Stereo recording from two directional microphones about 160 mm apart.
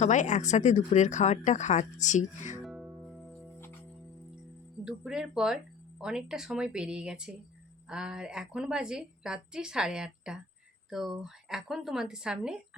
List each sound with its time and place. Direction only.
0.0 s speech: 50° left (ahead or behind)
2.6 s music: centre (ahead or behind)
4.9 s a woman's voice: 5° right (ahead or behind)